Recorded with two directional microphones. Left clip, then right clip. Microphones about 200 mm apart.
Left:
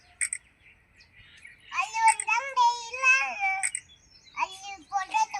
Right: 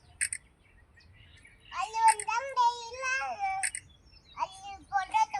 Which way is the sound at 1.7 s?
15° right (ahead or behind).